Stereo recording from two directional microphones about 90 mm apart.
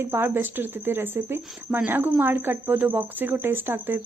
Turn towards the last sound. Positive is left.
turn(degrees=-25)  # may be behind; listen again after turning